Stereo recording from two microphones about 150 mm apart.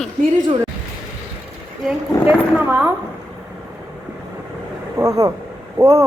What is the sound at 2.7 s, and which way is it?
Speech, 15° right (ahead or behind).